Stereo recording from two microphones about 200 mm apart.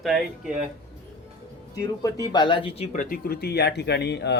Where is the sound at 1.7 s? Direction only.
15° left (ahead or behind).